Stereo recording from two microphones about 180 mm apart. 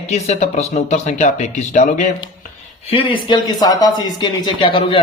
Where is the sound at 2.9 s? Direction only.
30° left (ahead or behind).